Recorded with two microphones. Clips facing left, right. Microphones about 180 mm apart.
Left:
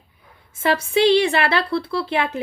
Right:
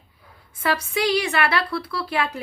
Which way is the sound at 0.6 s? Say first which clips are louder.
Left 6 dB; 25° left (ahead or behind).